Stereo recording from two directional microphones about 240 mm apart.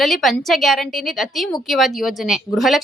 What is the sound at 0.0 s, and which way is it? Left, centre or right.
A woman's voice, centre.